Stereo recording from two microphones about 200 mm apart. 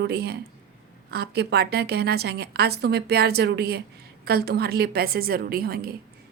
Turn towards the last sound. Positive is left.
turn(degrees=-50)  # may be behind; listen again after turning